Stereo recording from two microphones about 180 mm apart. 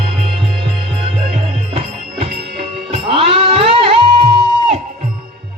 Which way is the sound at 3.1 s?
30° right (ahead or behind).